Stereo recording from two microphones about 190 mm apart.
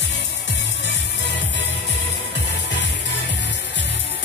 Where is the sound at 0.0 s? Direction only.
70° left (ahead or behind).